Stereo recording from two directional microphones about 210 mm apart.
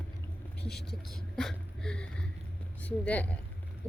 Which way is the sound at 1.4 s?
5° left (ahead or behind).